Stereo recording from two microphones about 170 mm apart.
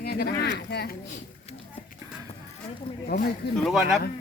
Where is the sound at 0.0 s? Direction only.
65° left (ahead or behind).